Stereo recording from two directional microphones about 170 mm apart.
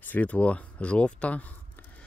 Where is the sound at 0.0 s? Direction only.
10° left (ahead or behind).